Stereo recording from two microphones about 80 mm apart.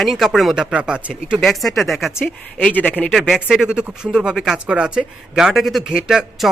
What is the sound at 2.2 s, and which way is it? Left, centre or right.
Speech, centre.